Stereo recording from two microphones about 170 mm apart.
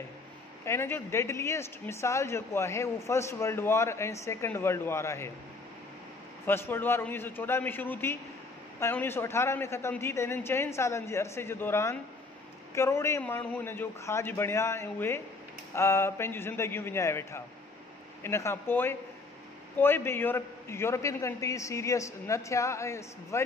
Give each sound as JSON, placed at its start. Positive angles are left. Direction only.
{"t": 0.7, "sound": "speech", "side_deg": 15}
{"t": 6.4, "sound": "speech", "side_deg": 15}